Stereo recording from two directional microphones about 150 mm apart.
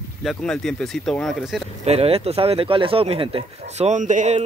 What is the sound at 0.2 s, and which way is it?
Speech, centre (ahead or behind).